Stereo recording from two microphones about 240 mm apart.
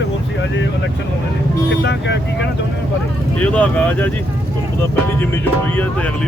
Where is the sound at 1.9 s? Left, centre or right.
Left.